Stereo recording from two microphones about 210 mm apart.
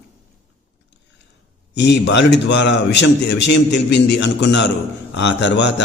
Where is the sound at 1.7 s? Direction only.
55° left (ahead or behind).